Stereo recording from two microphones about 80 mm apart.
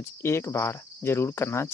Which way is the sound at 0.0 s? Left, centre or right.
Left.